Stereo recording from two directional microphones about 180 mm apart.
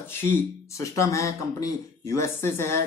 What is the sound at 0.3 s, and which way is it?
Speech, 15° left (ahead or behind).